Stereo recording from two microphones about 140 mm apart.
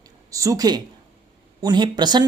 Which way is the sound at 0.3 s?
25° right (ahead or behind).